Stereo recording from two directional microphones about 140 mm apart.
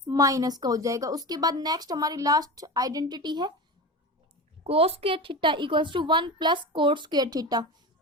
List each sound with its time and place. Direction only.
0.0 s a woman's voice: 25° right (ahead or behind)
4.6 s a woman's voice: 45° right (ahead or behind)